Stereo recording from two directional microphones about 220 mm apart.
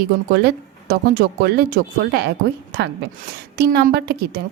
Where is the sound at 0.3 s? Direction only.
45° right (ahead or behind).